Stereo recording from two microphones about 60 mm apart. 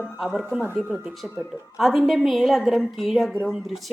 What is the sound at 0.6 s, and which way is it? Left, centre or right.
Speech, right.